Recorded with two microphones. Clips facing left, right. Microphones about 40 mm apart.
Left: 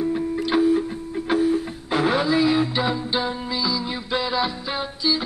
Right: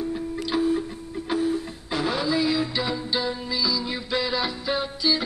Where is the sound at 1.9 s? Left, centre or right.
Left.